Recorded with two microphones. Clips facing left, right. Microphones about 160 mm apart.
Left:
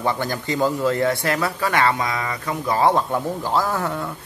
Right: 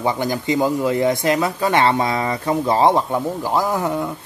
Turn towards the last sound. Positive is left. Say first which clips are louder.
# right 4 dB
turn(degrees=-15)  # may be behind; listen again after turning